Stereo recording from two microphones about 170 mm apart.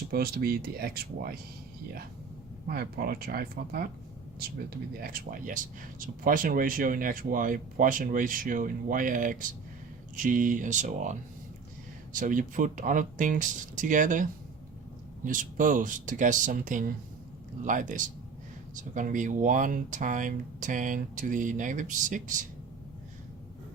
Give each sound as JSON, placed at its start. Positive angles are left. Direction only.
{"t": 0.1, "sound": "speech", "side_deg": -65}
{"t": 2.6, "sound": "speech", "side_deg": -65}
{"t": 4.9, "sound": "speech", "side_deg": -55}